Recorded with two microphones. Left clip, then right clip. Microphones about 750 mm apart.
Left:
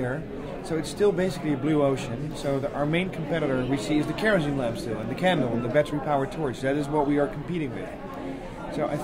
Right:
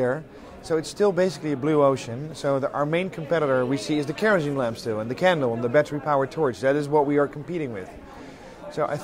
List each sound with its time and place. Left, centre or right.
0.7 s a man's voice: right